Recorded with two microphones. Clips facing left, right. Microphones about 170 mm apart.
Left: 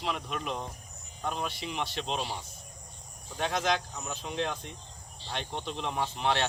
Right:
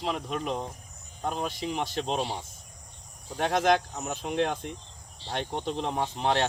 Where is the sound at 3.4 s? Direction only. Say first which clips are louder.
Right 6 dB; 50° right (ahead or behind).